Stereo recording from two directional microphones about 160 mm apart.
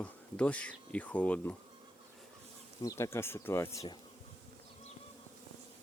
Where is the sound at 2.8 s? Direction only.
20° left (ahead or behind).